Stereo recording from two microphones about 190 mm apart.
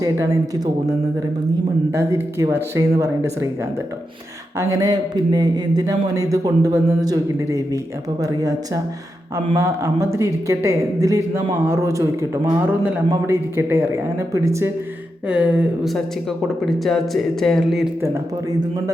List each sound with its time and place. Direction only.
0.0 s speech: 20° right (ahead or behind)
4.5 s speech: 20° right (ahead or behind); by 17.9 s centre (ahead or behind)